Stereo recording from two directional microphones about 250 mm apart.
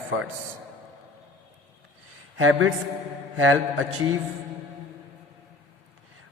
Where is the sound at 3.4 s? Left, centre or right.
Right.